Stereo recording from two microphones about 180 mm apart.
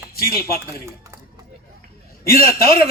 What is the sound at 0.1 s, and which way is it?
Speech, 55° left (ahead or behind).